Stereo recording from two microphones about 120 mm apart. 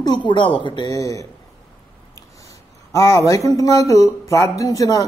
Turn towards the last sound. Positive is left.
turn(degrees=25)  # may be behind; listen again after turning